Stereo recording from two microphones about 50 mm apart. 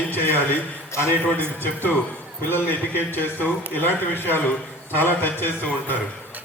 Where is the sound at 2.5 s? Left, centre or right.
Left.